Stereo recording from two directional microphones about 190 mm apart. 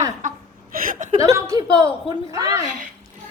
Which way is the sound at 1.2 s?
20° right (ahead or behind).